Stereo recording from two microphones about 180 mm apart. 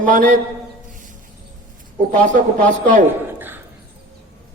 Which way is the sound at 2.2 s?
45° right (ahead or behind).